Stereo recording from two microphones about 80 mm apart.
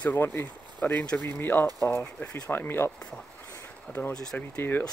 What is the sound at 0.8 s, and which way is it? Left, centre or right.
Speech, left.